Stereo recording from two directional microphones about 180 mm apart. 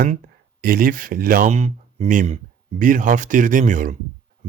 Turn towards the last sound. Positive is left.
turn(degrees=-45)  # may be behind; listen again after turning